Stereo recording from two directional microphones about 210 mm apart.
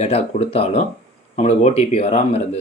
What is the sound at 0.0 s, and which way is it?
Speech, 30° left (ahead or behind).